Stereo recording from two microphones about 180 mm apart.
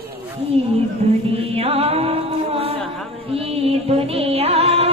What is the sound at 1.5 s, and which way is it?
Music, 35° right (ahead or behind).